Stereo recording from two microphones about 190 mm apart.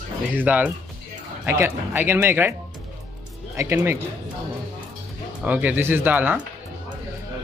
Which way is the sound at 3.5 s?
15° right (ahead or behind).